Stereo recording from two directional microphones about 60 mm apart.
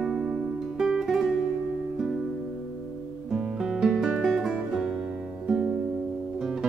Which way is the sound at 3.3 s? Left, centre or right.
Centre.